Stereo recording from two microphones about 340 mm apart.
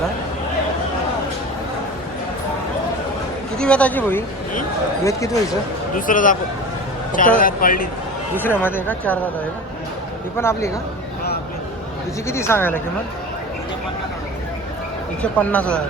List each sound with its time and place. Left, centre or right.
3.6 s speech: centre
5.9 s a man's voice: left
8.4 s speech: centre
10.3 s speech: centre
12.3 s speech: centre
15.2 s speech: centre